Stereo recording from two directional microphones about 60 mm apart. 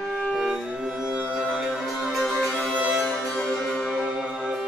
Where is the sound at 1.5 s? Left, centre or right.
Centre.